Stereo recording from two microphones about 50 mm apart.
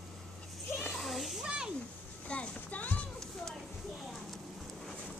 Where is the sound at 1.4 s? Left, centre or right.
Centre.